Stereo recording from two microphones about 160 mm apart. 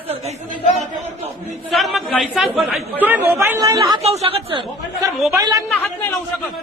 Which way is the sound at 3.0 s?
15° right (ahead or behind).